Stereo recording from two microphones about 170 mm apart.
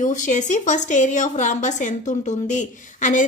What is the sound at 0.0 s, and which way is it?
A woman's voice, 45° left (ahead or behind).